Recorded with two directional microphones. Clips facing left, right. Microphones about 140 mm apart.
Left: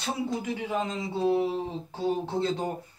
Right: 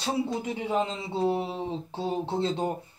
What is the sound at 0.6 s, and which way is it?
Speech, 25° right (ahead or behind).